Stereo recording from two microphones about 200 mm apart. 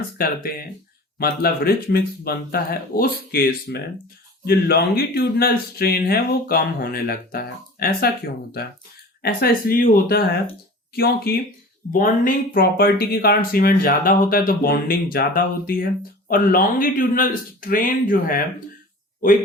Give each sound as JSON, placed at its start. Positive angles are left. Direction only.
{"t": 0.2, "sound": "speech", "side_deg": 50}